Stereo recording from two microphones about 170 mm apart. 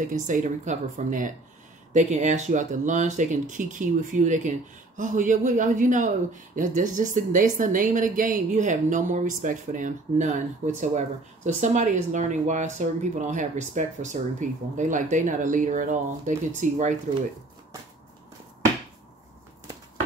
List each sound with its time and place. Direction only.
0.3 s speech: 50° right (ahead or behind)